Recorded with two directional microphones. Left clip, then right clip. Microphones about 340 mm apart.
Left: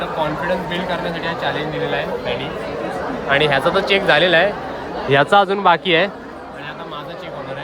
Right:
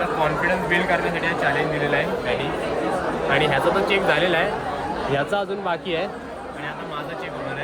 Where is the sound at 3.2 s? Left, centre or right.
Left.